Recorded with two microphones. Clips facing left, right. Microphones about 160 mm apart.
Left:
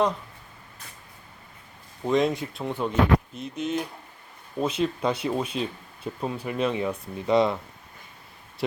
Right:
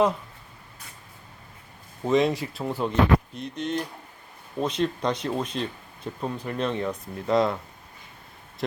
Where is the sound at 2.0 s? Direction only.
Centre (ahead or behind).